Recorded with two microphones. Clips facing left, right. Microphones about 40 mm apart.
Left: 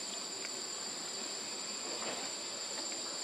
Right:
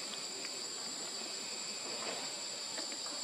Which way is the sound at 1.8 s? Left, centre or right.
Centre.